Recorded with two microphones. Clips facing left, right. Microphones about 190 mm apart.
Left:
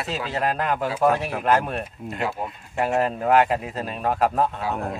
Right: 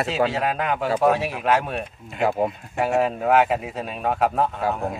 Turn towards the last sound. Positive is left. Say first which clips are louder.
# even
turn(degrees=0)  # may be behind; listen again after turning